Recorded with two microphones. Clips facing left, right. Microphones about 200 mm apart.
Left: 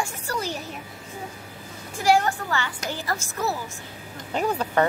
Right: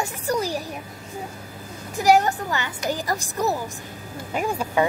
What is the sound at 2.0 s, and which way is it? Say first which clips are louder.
A woman's voice: right 3 dB; 20° right (ahead or behind).